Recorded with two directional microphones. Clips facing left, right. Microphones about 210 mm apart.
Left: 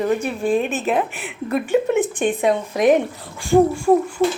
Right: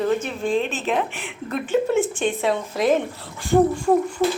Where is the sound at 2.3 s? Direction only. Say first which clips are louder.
Left 3 dB; 15° left (ahead or behind).